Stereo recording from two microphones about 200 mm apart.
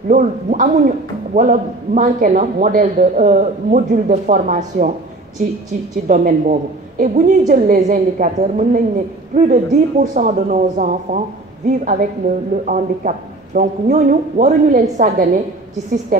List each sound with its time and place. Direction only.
0.1 s a woman's voice: 40° right (ahead or behind)
6.0 s a woman's voice: 40° right (ahead or behind)